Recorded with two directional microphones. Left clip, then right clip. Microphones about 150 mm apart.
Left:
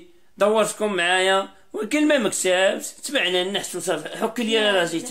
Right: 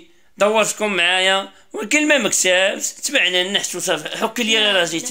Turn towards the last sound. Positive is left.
turn(degrees=-15)  # may be behind; listen again after turning